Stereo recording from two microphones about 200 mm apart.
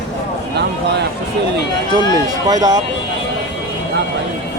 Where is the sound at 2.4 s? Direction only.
20° right (ahead or behind).